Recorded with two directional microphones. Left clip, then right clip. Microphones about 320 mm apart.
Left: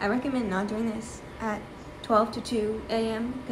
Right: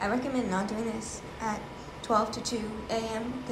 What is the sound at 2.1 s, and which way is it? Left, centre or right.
A woman's voice, centre.